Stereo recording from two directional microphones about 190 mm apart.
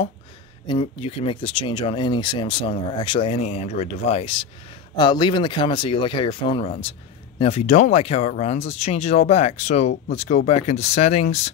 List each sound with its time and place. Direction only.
0.7 s speech: 30° left (ahead or behind)